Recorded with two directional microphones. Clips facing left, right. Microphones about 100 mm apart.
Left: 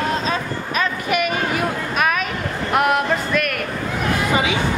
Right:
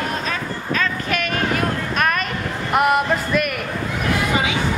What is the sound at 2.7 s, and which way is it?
Music, centre (ahead or behind).